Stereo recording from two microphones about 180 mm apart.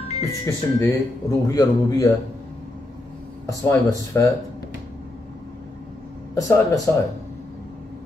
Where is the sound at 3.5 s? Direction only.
15° left (ahead or behind).